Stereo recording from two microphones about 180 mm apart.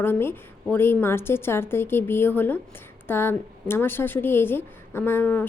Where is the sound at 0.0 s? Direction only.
10° left (ahead or behind).